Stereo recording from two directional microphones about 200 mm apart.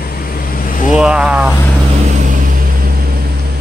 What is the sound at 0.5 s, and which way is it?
Vehicle, 45° left (ahead or behind).